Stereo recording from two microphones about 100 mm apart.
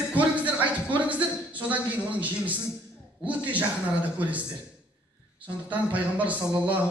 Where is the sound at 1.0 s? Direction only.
15° right (ahead or behind).